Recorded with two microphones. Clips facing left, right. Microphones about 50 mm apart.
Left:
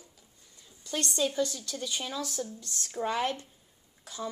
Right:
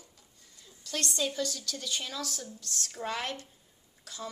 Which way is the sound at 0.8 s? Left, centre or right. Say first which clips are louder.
Left 2 dB; left.